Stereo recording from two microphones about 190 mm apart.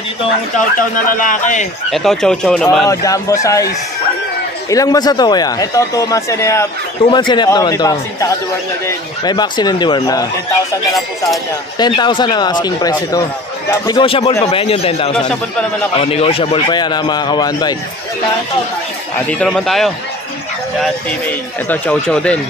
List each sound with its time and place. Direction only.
0.6 s speech: 45° left (ahead or behind)
1.9 s speech: centre (ahead or behind)
2.9 s speech: 15° left (ahead or behind)
4.6 s a man's voice: 20° left (ahead or behind)
11.8 s a man's voice: 25° left (ahead or behind)
19.1 s speech: 5° left (ahead or behind)